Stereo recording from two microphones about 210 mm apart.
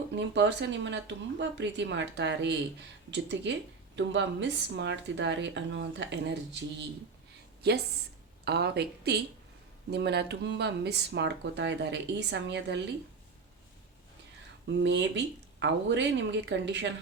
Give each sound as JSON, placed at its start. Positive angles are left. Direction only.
{"t": 0.2, "sound": "speech", "side_deg": -55}
{"t": 14.8, "sound": "speech", "side_deg": -55}